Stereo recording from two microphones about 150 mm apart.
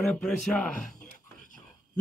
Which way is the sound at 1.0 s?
60° left (ahead or behind).